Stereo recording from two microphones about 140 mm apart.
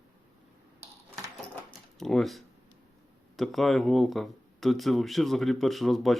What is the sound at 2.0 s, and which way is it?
Speech, centre (ahead or behind).